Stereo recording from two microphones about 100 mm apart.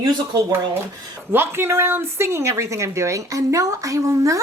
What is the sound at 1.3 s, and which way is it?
Speech, 25° right (ahead or behind).